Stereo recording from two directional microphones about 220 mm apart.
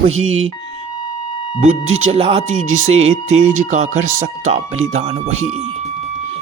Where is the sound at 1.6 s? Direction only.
30° right (ahead or behind).